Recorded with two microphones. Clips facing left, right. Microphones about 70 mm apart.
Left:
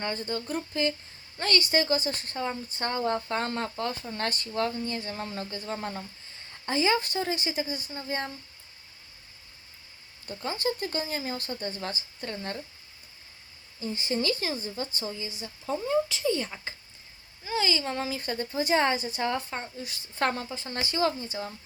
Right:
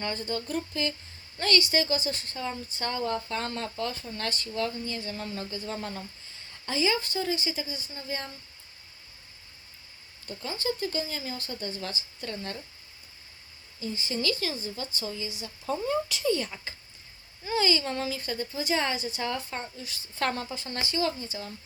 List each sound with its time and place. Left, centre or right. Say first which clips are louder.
0.0 s speech: even; left
5.6 s speech: left 3 dB; left
6.7 s speech: left 2 dB; left
10.2 s speech: left 2 dB; left
11.8 s speech: left 1 dB; left
13.7 s speech: left 3 dB; left
15.4 s speech: even; centre
16.0 s speech: right 1 dB; centre
17.4 s speech: right 2 dB; centre
18.2 s speech: left 3 dB; left
19.5 s speech: left 1 dB; centre
20.9 s speech: left 3 dB; left